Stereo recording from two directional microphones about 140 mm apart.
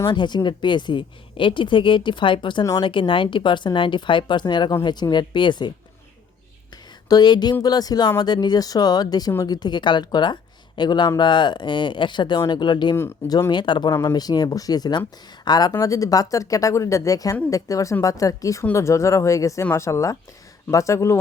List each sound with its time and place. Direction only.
0.0 s speech: 30° left (ahead or behind)
7.1 s speech: 30° left (ahead or behind)
13.0 s speech: 25° left (ahead or behind)